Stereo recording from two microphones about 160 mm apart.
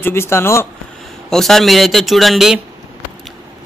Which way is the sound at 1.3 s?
Centre (ahead or behind).